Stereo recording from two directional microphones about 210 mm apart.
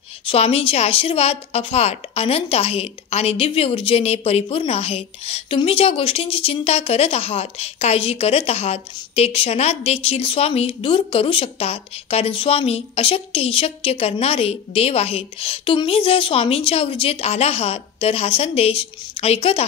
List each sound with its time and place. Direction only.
0.3 s a woman's voice: 25° left (ahead or behind)